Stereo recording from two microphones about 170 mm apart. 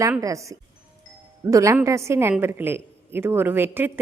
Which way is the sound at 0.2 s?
20° right (ahead or behind).